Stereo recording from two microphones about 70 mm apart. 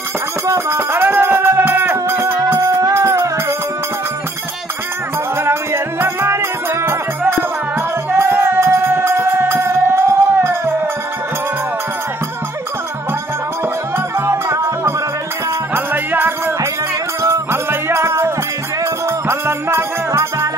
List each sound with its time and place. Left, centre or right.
0.5 s music: right
2.5 s music: right
5.4 s music: right
13.9 s music: right
15.7 s music: right